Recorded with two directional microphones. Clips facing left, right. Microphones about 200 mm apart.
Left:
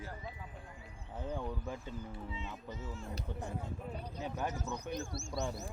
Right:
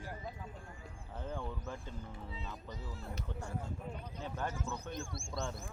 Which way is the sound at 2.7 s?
35° right (ahead or behind).